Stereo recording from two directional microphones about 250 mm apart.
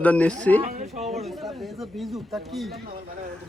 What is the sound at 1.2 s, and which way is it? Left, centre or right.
Speech, centre.